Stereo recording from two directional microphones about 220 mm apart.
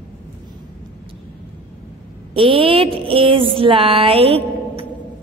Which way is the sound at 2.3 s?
25° right (ahead or behind).